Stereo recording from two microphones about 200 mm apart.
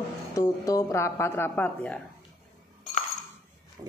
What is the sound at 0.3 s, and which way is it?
Speech, 15° left (ahead or behind).